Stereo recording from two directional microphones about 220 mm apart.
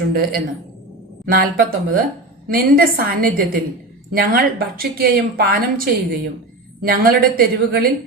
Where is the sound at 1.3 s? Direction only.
40° right (ahead or behind).